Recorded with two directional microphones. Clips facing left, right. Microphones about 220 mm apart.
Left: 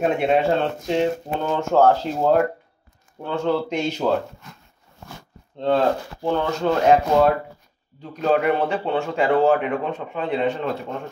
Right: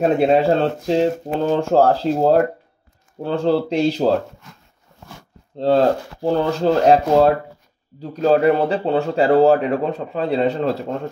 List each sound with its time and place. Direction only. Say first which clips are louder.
0.0 s speech: right 4 dB; 35° right (ahead or behind)
5.6 s speech: right 4 dB; 35° right (ahead or behind)